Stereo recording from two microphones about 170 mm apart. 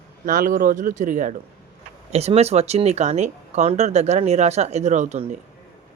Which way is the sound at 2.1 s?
40° right (ahead or behind).